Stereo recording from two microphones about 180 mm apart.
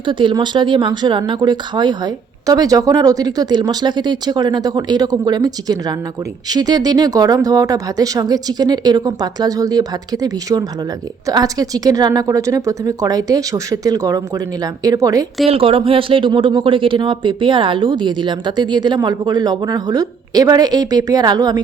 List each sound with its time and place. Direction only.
0.0 s speech: 25° right (ahead or behind)
15.4 s speech: 30° right (ahead or behind)